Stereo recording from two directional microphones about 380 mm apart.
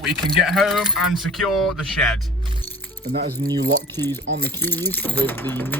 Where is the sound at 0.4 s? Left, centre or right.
Centre.